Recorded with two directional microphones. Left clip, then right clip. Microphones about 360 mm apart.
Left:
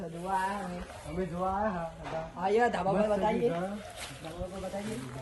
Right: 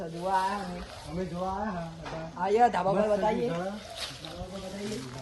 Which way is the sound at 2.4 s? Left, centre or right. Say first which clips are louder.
Right 4 dB; centre.